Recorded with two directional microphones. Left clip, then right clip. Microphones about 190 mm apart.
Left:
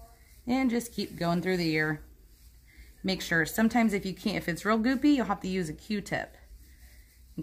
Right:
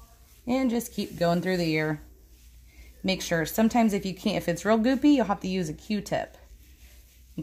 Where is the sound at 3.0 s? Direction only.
25° right (ahead or behind).